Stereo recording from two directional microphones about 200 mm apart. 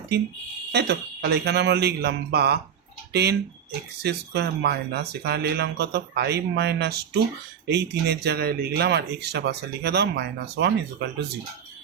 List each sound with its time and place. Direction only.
0.7 s speech: 55° right (ahead or behind)